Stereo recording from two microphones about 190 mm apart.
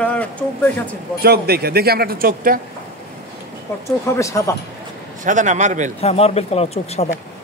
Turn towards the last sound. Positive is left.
turn(degrees=35)  # may be behind; listen again after turning